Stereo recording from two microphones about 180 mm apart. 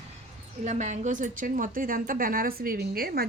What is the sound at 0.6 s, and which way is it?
A woman's voice, 40° right (ahead or behind).